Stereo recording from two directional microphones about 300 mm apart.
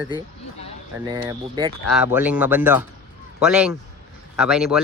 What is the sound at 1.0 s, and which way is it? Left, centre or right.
Speech, centre.